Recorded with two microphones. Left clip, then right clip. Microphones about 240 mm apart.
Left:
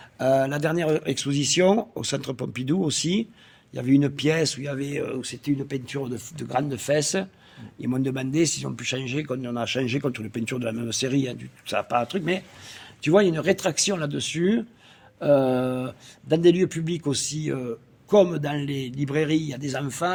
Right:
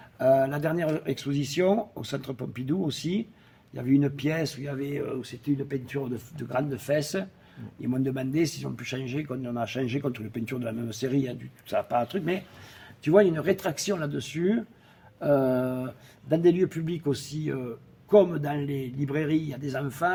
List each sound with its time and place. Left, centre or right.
0.2 s speech: left